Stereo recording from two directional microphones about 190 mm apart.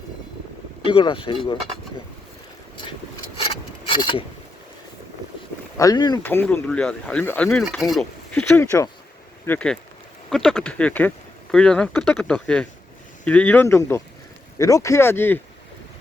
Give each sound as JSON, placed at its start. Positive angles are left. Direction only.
{"t": 0.9, "sound": "speech", "side_deg": 25}
{"t": 3.5, "sound": "wood", "side_deg": 25}
{"t": 5.7, "sound": "speech", "side_deg": 20}
{"t": 6.2, "sound": "speech", "side_deg": 10}